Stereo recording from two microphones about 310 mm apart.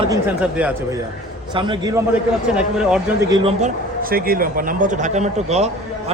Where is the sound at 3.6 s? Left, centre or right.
Right.